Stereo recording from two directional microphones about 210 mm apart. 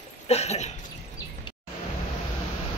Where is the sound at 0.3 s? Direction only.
30° left (ahead or behind).